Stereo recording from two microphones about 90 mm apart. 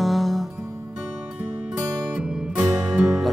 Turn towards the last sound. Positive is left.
turn(degrees=-15)  # may be behind; listen again after turning